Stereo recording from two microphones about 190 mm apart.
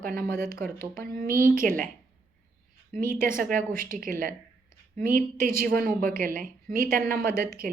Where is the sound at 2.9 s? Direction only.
45° right (ahead or behind).